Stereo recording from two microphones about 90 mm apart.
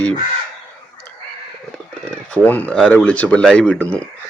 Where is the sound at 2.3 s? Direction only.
20° left (ahead or behind).